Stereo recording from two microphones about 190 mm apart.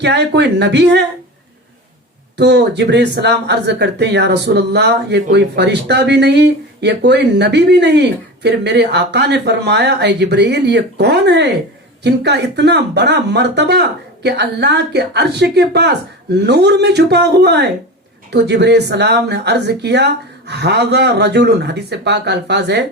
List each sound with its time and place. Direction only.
0.0 s speech: 65° right (ahead or behind)
2.4 s speech: 65° right (ahead or behind)